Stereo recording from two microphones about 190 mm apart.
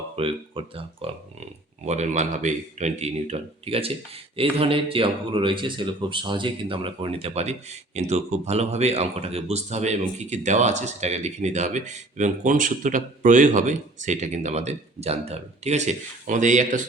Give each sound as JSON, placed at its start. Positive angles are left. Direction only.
{"t": 0.2, "sound": "speech", "side_deg": -30}